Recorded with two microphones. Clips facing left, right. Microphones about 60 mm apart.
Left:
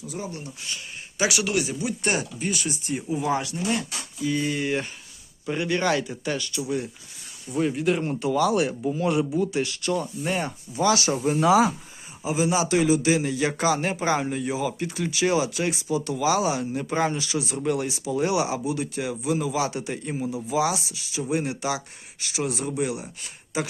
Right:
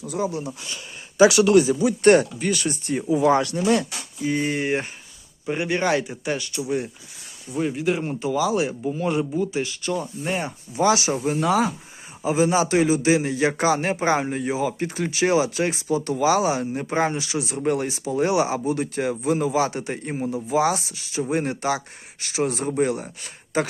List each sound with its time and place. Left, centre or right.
0.0 s speech: right
2.0 s speech: right
4.2 s a man's voice: right
7.5 s speech: centre
10.2 s speech: centre
10.8 s a man's voice: right
11.3 s speech: centre
12.2 s a man's voice: right